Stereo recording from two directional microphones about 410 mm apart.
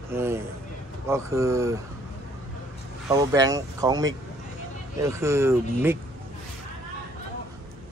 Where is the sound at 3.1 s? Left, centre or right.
Centre.